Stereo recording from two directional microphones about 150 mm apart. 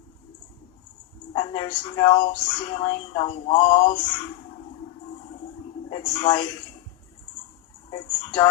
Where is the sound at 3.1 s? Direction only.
35° left (ahead or behind).